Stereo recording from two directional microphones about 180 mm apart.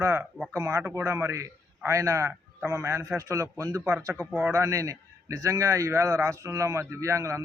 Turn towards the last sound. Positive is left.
turn(degrees=-15)  # may be behind; listen again after turning